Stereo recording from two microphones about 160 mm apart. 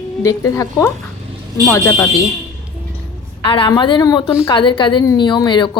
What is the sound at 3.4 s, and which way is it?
Speech, 35° left (ahead or behind).